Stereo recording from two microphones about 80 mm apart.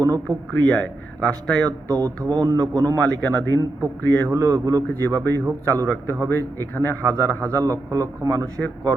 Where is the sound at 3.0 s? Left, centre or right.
Centre.